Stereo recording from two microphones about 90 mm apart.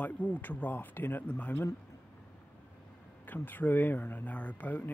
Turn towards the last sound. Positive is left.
turn(degrees=15)  # may be behind; listen again after turning